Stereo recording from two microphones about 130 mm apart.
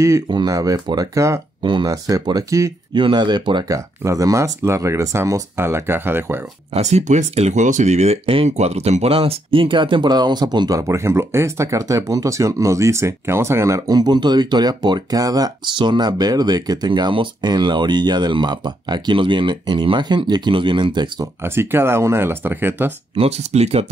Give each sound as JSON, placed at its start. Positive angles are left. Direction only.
{"t": 0.3, "sound": "speech", "side_deg": -30}
{"t": 1.6, "sound": "speech", "side_deg": -35}
{"t": 6.7, "sound": "speech", "side_deg": -60}
{"t": 21.4, "sound": "speech", "side_deg": -20}
{"t": 23.1, "sound": "speech", "side_deg": -50}